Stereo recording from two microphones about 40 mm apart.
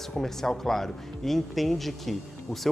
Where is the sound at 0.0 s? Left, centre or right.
Centre.